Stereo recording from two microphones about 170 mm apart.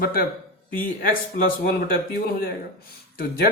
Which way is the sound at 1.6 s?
60° left (ahead or behind).